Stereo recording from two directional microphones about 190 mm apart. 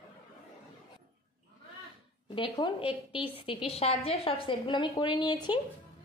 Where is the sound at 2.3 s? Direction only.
25° left (ahead or behind).